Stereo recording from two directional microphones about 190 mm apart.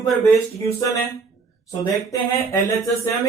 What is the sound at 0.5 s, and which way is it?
Speech, 15° left (ahead or behind).